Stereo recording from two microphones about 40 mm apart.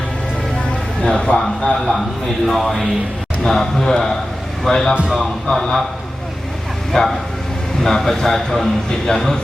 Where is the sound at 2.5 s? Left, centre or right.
Centre.